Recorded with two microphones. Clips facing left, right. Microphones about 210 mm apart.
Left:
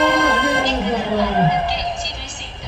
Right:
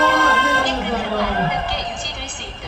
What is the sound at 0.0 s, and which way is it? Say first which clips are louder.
Music: left 2 dB; 15° left (ahead or behind).